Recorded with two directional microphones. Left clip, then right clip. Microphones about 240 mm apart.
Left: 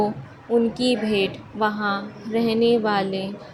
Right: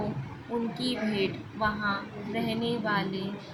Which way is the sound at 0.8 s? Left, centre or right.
Left.